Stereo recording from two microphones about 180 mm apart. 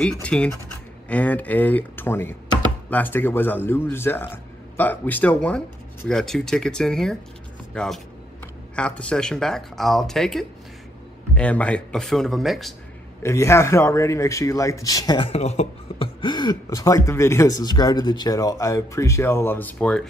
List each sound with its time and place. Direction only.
0.0 s a man's voice: 5° left (ahead or behind)
13.2 s a man's voice: 15° left (ahead or behind)